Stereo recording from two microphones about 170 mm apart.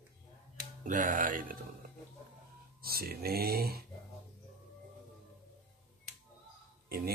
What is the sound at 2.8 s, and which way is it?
Speech, 65° right (ahead or behind).